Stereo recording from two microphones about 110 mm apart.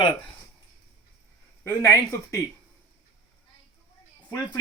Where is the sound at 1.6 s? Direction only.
25° left (ahead or behind).